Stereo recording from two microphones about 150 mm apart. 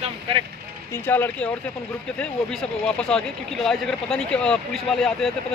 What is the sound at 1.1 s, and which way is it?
Speech, 15° left (ahead or behind).